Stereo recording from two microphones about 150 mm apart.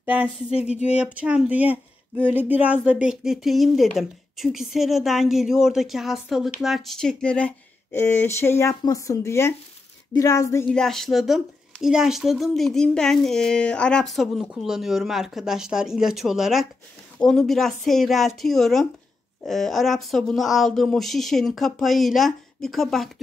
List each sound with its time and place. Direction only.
0.0 s a sound: 10° right (ahead or behind)
0.8 s a woman's voice: 10° right (ahead or behind); by 10.6 s 20° left (ahead or behind)
10.6 s a woman's voice: 5° left (ahead or behind)